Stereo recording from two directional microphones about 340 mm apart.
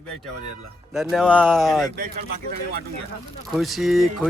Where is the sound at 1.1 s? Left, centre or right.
Centre.